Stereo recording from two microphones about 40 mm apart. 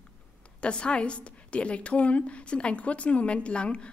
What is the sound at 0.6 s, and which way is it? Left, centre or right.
A woman's voice, left.